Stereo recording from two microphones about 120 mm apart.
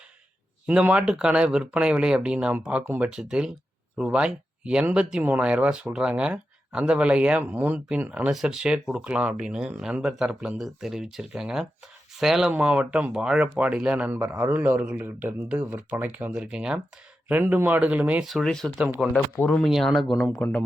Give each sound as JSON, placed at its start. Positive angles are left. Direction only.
{"t": 0.7, "sound": "speech", "side_deg": -10}
{"t": 3.1, "sound": "speech", "side_deg": -5}
{"t": 18.3, "sound": "speech", "side_deg": 0}